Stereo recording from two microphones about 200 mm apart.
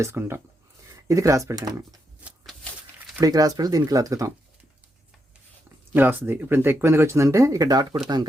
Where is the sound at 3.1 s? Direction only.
15° right (ahead or behind).